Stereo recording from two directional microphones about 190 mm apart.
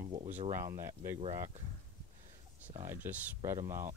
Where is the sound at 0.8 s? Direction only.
15° right (ahead or behind).